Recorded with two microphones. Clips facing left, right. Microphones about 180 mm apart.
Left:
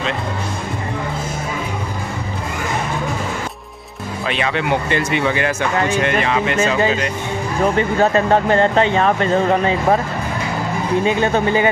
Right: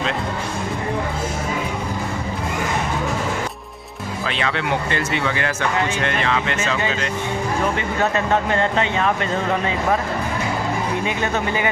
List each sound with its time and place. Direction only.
4.3 s speech: 15° left (ahead or behind)
7.7 s speech: 35° left (ahead or behind)
11.1 s speech: 30° left (ahead or behind)